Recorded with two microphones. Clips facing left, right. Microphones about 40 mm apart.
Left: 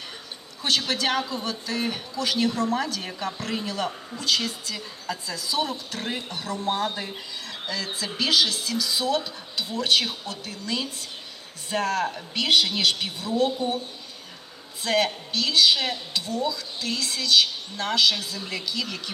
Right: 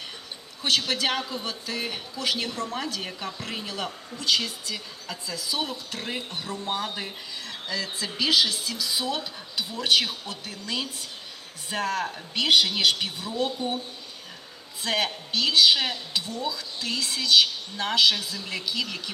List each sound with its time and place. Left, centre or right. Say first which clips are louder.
0.9 s speech: left 2 dB; centre
14.8 s speech: left 3 dB; centre